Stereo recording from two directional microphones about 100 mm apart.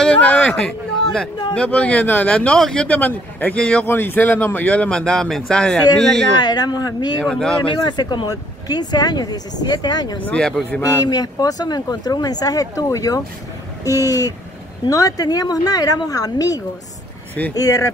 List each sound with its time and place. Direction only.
0.0 s a sound: 15° left (ahead or behind)
0.6 s a man's voice: 5° left (ahead or behind)
3.8 s a man's voice: 20° left (ahead or behind); by 6.2 s 5° left (ahead or behind)
6.3 s speech: 45° left (ahead or behind)
7.2 s a man's voice: 5° left (ahead or behind)
7.8 s speech: 45° left (ahead or behind)
10.2 s a man's voice: 10° left (ahead or behind)
10.8 s speech: 35° left (ahead or behind)